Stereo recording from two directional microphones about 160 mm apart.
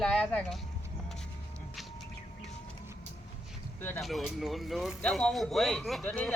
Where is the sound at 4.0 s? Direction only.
Centre (ahead or behind).